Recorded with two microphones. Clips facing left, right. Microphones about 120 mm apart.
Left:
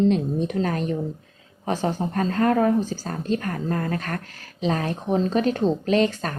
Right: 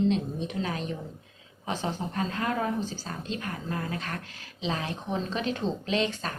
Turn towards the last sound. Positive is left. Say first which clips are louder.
# left 8 dB
turn(degrees=45)  # may be behind; listen again after turning